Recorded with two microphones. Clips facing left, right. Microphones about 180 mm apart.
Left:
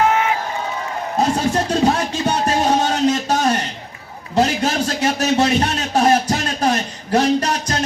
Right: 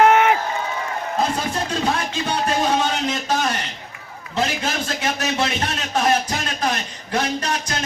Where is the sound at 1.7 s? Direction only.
40° left (ahead or behind).